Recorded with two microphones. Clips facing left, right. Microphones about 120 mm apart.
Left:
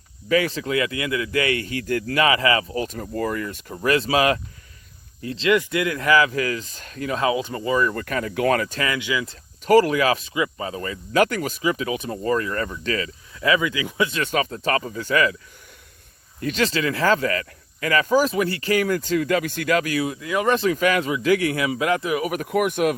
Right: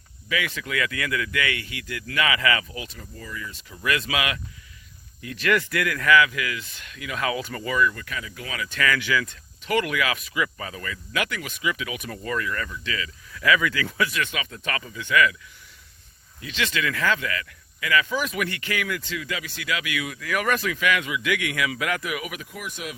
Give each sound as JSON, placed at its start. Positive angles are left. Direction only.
{"t": 0.3, "sound": "speech", "side_deg": 35}
{"t": 2.8, "sound": "speech", "side_deg": 50}
{"t": 7.2, "sound": "speech", "side_deg": 25}
{"t": 7.8, "sound": "speech", "side_deg": 45}
{"t": 8.8, "sound": "speech", "side_deg": 20}
{"t": 9.2, "sound": "speech", "side_deg": 35}
{"t": 13.3, "sound": "speech", "side_deg": 25}
{"t": 16.4, "sound": "speech", "side_deg": 45}
{"t": 16.6, "sound": "speech", "side_deg": 35}
{"t": 22.4, "sound": "speech", "side_deg": 60}